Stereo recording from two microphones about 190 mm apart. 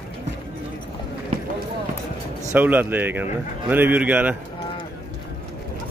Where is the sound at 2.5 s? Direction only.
10° right (ahead or behind).